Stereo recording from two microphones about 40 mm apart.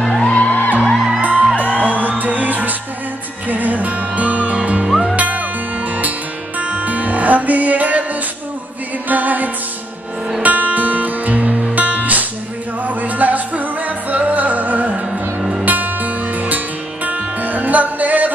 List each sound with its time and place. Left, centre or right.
0.3 s music: left
0.8 s music: centre
1.2 s music: right